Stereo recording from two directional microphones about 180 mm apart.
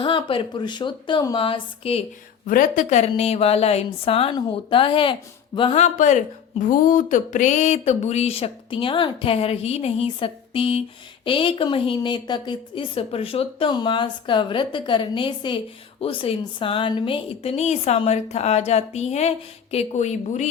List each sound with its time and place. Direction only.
0.0 s a woman's voice: 30° left (ahead or behind)
2.5 s a woman's voice: 50° left (ahead or behind)